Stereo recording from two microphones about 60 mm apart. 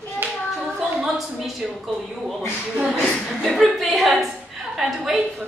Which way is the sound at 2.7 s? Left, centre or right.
Centre.